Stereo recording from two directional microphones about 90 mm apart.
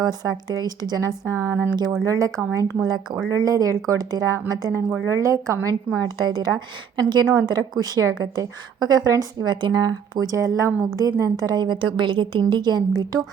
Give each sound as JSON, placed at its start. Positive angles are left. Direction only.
{"t": 0.0, "sound": "a woman's voice", "side_deg": -50}
{"t": 2.8, "sound": "a woman's voice", "side_deg": -50}
{"t": 3.3, "sound": "a woman's voice", "side_deg": -40}
{"t": 5.6, "sound": "a woman's voice", "side_deg": -45}